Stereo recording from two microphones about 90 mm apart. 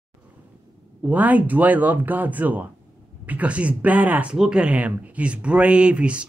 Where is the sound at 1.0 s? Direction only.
15° right (ahead or behind).